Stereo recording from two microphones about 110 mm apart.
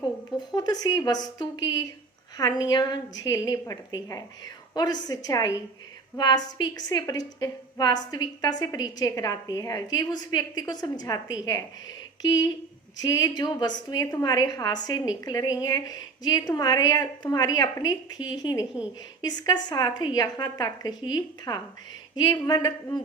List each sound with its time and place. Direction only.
0.3 s a woman's voice: 40° left (ahead or behind)
13.0 s a woman's voice: 35° left (ahead or behind)